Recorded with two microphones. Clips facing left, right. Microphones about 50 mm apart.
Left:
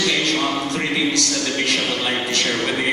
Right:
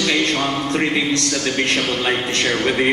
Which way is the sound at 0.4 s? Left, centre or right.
Centre.